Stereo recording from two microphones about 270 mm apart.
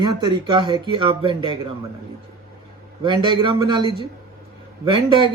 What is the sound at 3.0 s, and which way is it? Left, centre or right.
Speech, centre.